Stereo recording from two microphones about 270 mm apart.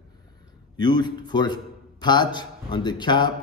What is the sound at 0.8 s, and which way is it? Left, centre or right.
A man's voice, centre.